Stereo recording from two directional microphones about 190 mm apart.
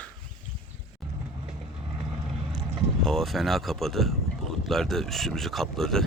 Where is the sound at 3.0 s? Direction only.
Centre (ahead or behind).